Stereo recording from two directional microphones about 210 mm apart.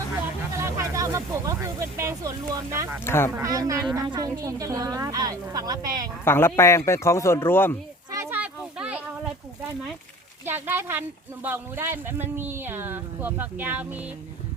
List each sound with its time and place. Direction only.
0.5 s speech: 15° right (ahead or behind)
3.0 s speech: 10° left (ahead or behind)
3.3 s a woman's voice: 15° right (ahead or behind)
6.2 s speech: 10° left (ahead or behind)
8.1 s a sound: 10° right (ahead or behind)
10.4 s a woman's voice: 10° right (ahead or behind)